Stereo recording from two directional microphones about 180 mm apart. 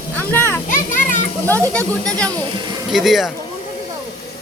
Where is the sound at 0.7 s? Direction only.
45° left (ahead or behind).